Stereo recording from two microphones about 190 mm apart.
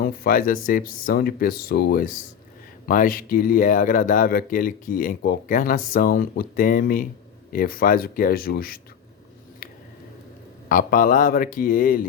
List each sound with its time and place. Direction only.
0.0 s speech: 50° left (ahead or behind)
10.7 s speech: 45° left (ahead or behind)